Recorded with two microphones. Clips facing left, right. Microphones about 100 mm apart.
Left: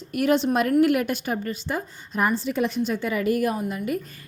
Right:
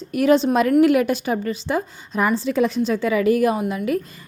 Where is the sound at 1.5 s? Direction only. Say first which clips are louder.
Right 6 dB; 90° right.